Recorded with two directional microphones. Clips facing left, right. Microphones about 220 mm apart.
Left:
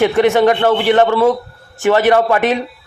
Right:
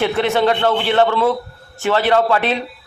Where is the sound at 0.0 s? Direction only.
15° left (ahead or behind).